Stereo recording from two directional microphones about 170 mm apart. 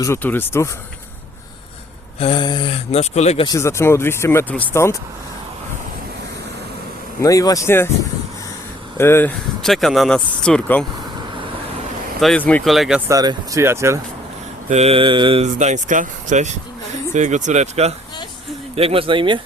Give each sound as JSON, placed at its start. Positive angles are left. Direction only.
{"t": 0.0, "sound": "speech", "side_deg": 15}
{"t": 2.1, "sound": "speech", "side_deg": 30}
{"t": 3.4, "sound": "speech", "side_deg": 20}
{"t": 7.2, "sound": "speech", "side_deg": 20}
{"t": 9.0, "sound": "speech", "side_deg": 15}
{"t": 9.6, "sound": "speech", "side_deg": 0}
{"t": 12.2, "sound": "speech", "side_deg": 5}
{"t": 13.1, "sound": "speech", "side_deg": -20}
{"t": 14.7, "sound": "mantra", "side_deg": -35}
{"t": 15.5, "sound": "speech", "side_deg": -45}
{"t": 18.8, "sound": "mantra", "side_deg": -35}